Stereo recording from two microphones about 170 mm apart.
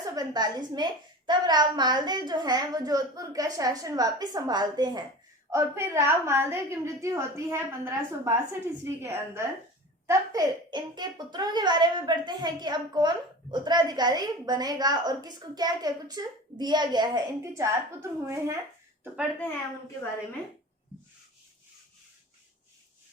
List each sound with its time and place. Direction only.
0.0 s a child's voice: 20° right (ahead or behind)